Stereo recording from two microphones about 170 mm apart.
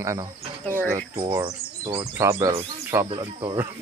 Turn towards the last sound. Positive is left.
turn(degrees=-30)  # may be behind; listen again after turning